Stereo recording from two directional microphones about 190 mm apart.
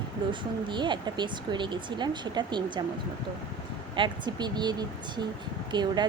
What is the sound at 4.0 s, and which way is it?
Speech, 25° right (ahead or behind).